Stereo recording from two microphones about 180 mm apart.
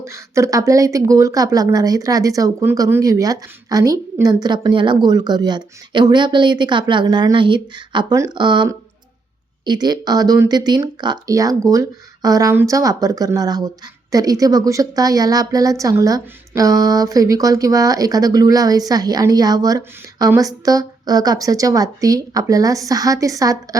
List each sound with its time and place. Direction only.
0.0 s speech: 15° right (ahead or behind)